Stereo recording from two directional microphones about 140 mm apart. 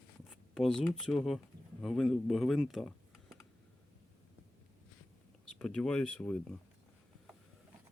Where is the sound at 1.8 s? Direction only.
Centre (ahead or behind).